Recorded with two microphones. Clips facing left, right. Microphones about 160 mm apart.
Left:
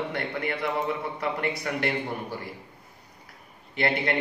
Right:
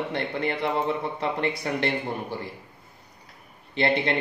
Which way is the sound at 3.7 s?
25° right (ahead or behind).